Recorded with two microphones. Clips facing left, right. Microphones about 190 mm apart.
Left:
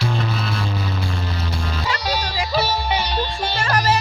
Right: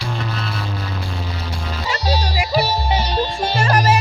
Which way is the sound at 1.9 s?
30° right (ahead or behind).